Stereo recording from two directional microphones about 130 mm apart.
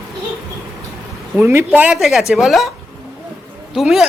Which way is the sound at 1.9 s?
Centre (ahead or behind).